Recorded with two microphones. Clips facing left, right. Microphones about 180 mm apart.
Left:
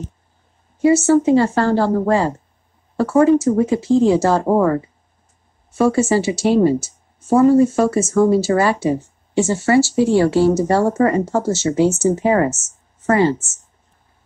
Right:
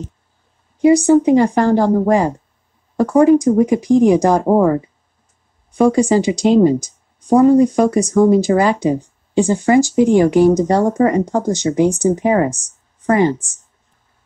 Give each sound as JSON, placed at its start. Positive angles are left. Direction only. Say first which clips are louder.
{"t": 0.7, "sound": "speech", "louder": "right 3 dB", "side_deg": -15}